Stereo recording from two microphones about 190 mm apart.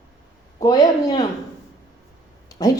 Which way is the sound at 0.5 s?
20° left (ahead or behind).